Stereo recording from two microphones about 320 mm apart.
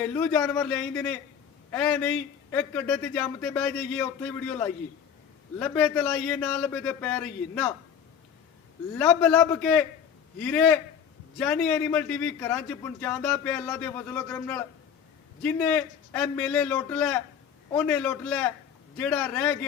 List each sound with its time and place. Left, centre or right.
0.0 s a man's voice: centre
9.0 s a man's voice: centre